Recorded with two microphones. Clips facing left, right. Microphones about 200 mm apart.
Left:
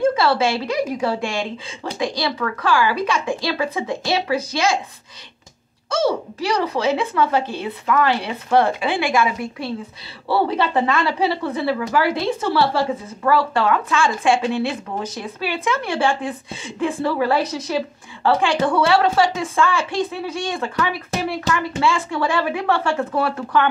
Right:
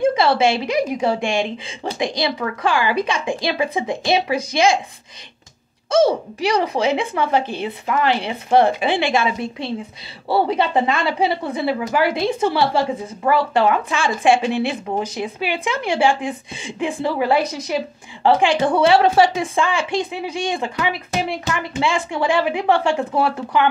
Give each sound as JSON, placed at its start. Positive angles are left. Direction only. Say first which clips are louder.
{"t": 0.0, "sound": "a woman's voice", "louder": "right 1 dB", "side_deg": -20}
{"t": 6.4, "sound": "a woman's voice", "louder": "right 2 dB", "side_deg": -20}